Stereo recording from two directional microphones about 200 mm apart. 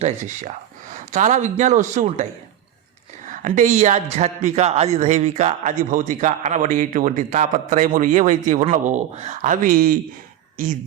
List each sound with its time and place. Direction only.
0.0 s a man's voice: 35° right (ahead or behind)
3.2 s a man's voice: 40° right (ahead or behind)